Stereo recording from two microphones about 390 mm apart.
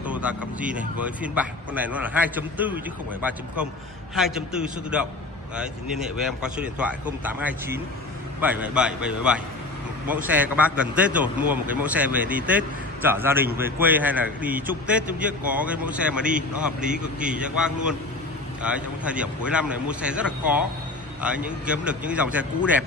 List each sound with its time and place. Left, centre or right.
0.0 s speech: centre
6.6 s speech: centre